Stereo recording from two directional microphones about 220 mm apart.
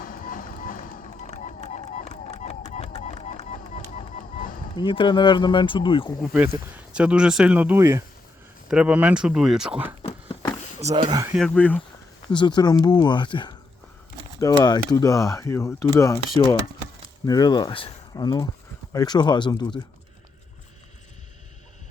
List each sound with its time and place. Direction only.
0.0 s music: 40° left (ahead or behind)
1.3 s run: 35° left (ahead or behind)
4.7 s speech: 20° left (ahead or behind)
6.1 s speech: 5° right (ahead or behind)
10.3 s a sound: 25° left (ahead or behind)
10.8 s speech: 25° right (ahead or behind)
11.3 s speech: 5° left (ahead or behind)
12.3 s speech: 20° left (ahead or behind)
14.6 s speech: 15° left (ahead or behind)
17.2 s speech: 15° left (ahead or behind)